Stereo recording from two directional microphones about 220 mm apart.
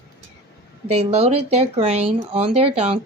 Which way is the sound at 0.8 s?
30° right (ahead or behind).